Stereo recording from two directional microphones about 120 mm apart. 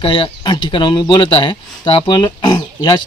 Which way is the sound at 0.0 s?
45° left (ahead or behind).